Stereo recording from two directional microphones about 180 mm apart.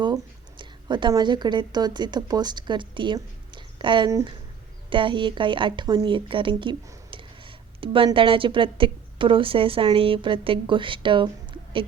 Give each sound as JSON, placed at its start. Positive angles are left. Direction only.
{"t": 0.6, "sound": "a woman's voice", "side_deg": -25}